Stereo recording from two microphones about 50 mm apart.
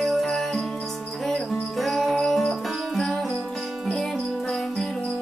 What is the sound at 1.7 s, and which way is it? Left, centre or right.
Music, centre.